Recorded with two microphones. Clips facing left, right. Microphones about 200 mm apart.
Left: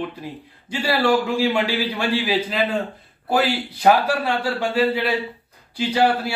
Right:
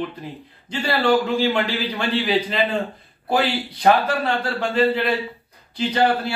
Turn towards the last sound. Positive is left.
turn(degrees=10)  # may be behind; listen again after turning